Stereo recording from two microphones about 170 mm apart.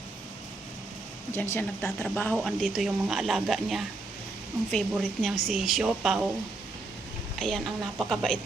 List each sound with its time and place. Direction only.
1.4 s speech: 15° left (ahead or behind)
7.3 s speech: 5° left (ahead or behind)